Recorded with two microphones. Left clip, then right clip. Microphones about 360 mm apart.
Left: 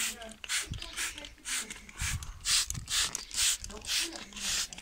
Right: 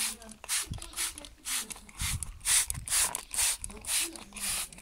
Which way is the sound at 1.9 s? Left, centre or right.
Centre.